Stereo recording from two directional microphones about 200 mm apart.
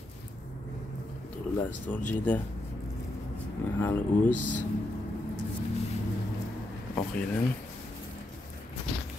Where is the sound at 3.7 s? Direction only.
10° left (ahead or behind).